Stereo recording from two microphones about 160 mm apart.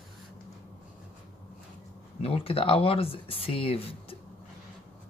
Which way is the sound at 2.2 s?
35° left (ahead or behind).